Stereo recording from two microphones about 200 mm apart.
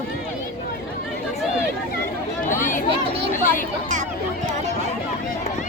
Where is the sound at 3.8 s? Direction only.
40° right (ahead or behind).